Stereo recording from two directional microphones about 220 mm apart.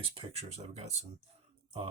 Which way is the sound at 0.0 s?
25° right (ahead or behind).